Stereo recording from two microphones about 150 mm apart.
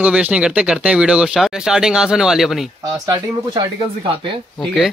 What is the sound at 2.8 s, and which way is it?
Speech, 25° right (ahead or behind).